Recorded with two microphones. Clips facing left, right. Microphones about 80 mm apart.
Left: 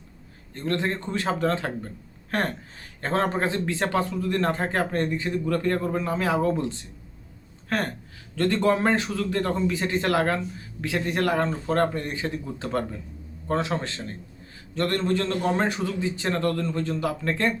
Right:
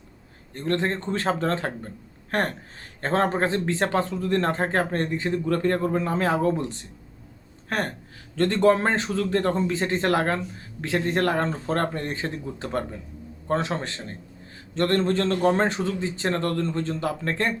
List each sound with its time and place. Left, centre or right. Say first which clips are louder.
0.5 s a man's voice: right 2 dB; right
1.1 s a man's voice: left 1 dB; right
3.0 s a man's voice: right 2 dB; right
8.4 s a man's voice: right 2 dB; right
12.5 s a man's voice: left 1 dB; right
14.8 s a man's voice: right 2 dB; right